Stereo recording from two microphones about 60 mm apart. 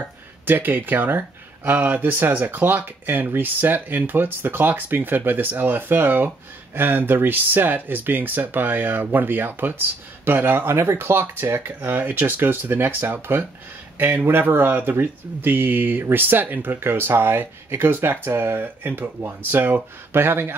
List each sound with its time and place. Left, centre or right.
0.0 s speech: right
10.7 s speech: right